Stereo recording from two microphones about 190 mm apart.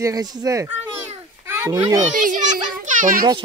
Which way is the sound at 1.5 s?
15° right (ahead or behind).